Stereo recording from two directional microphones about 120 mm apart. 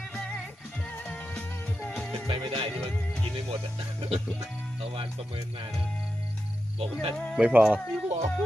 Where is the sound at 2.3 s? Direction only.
45° right (ahead or behind).